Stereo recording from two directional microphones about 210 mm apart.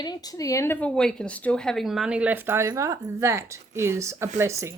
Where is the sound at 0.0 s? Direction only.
20° left (ahead or behind).